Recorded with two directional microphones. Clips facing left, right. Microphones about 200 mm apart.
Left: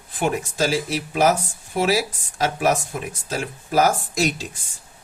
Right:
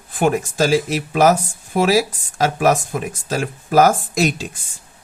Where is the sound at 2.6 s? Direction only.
80° right; by 4.3 s 55° right (ahead or behind).